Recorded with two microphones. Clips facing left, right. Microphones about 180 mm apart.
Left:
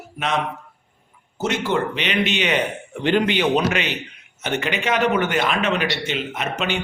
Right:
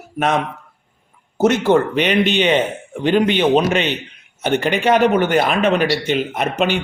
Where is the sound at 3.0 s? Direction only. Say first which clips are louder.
Right 4 dB; 15° right (ahead or behind).